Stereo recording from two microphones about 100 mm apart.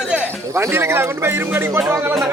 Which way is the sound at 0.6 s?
25° right (ahead or behind).